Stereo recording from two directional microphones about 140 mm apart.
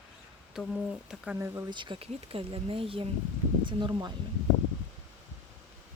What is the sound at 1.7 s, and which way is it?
Speech, 35° right (ahead or behind).